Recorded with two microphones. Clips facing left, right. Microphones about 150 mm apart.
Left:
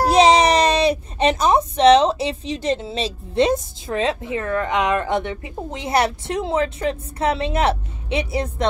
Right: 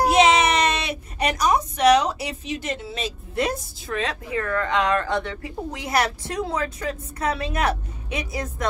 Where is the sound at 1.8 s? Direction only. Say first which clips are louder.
Left 5 dB; 25° left (ahead or behind).